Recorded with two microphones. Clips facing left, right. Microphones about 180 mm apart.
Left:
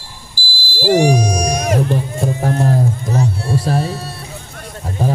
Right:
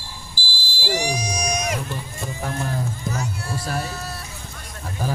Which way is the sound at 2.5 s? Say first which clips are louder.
Left 10 dB; 35° left (ahead or behind).